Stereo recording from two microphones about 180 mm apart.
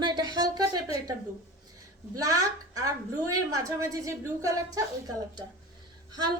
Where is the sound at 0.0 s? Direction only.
25° right (ahead or behind).